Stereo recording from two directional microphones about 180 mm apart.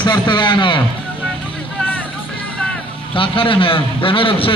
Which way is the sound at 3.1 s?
30° left (ahead or behind).